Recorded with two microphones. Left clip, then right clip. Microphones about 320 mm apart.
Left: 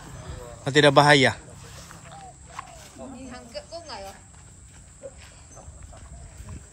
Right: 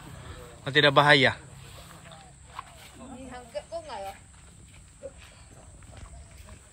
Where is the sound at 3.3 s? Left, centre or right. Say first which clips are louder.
Right 4 dB; right.